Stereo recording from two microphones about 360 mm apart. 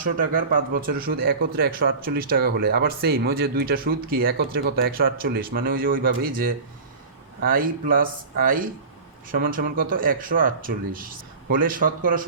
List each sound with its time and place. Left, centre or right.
0.0 s speech: right